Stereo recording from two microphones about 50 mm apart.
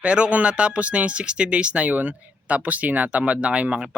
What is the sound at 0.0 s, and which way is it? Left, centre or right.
Speech, right.